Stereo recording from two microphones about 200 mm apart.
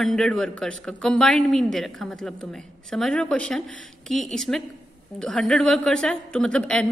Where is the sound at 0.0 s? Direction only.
Centre (ahead or behind).